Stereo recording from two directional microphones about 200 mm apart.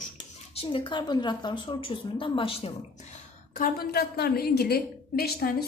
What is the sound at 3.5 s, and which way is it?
A woman's voice, 45° left (ahead or behind).